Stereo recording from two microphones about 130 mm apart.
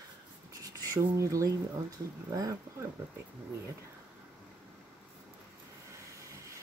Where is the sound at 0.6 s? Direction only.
25° right (ahead or behind).